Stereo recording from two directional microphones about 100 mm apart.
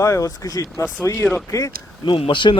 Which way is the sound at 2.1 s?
55° left (ahead or behind).